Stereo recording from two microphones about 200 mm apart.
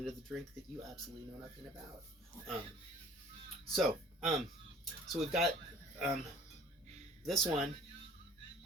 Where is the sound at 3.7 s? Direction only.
Centre (ahead or behind).